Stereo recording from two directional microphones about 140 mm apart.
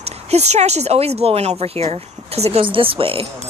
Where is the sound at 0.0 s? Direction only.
50° right (ahead or behind).